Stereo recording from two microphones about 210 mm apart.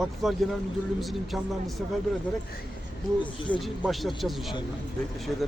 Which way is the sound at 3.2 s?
25° left (ahead or behind).